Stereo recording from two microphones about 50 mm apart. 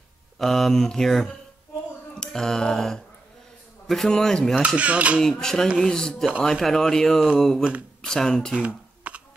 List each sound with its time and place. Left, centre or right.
0.4 s mantra: centre
2.1 s a sound: centre
3.8 s a man's voice: centre
4.1 s speech: centre
4.6 s speech: right
5.2 s speech: centre
7.3 s mantra: centre
8.0 s speech: centre
8.5 s a sound: right